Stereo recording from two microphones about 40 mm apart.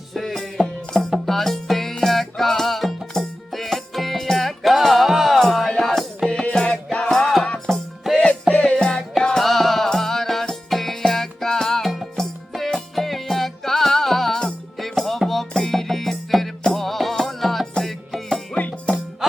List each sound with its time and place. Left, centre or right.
0.1 s music: centre
0.6 s music: centre
1.2 s music: centre
8.1 s music: centre
8.6 s music: centre
9.4 s music: centre
18.5 s music: left